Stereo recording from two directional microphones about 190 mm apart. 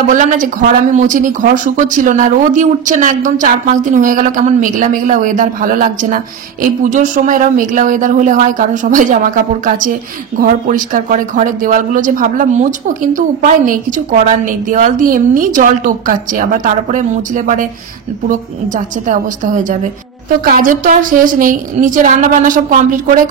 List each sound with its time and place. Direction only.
0.1 s a woman's voice: 45° right (ahead or behind)